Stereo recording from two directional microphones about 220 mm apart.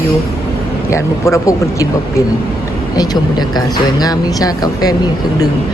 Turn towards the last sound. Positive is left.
turn(degrees=15)  # may be behind; listen again after turning